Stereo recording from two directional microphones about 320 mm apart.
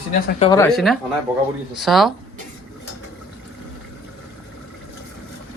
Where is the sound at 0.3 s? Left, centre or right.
Centre.